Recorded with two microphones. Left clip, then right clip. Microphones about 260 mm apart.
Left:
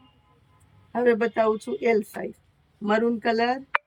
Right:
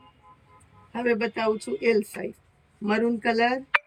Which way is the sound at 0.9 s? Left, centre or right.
Centre.